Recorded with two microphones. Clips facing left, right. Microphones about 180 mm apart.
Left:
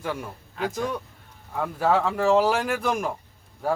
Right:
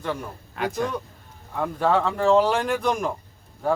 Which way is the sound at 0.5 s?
70° right (ahead or behind).